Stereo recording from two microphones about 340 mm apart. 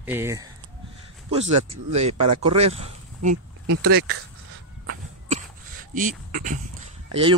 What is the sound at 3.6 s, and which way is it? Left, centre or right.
Speech, right.